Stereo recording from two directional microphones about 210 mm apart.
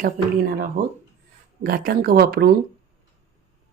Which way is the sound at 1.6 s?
45° right (ahead or behind).